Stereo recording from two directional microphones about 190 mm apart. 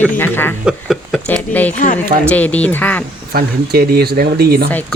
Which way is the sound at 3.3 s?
55° right (ahead or behind).